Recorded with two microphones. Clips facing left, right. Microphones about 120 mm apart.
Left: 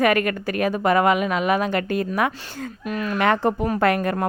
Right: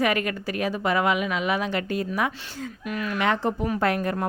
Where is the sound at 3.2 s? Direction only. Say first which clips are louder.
Left 5 dB; 55° left (ahead or behind).